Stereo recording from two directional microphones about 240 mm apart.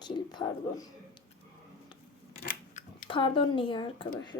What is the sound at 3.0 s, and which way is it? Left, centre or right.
Speech, left.